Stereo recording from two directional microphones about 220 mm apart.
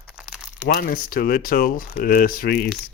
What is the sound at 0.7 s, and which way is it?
Speech, 40° left (ahead or behind).